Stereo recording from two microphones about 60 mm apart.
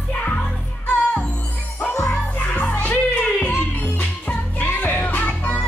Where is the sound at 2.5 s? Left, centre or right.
Left.